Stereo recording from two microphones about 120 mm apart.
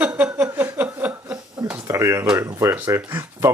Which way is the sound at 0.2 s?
15° right (ahead or behind).